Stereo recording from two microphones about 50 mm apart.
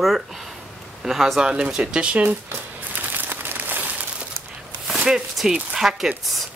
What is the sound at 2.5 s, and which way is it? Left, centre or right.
Crumpling, right.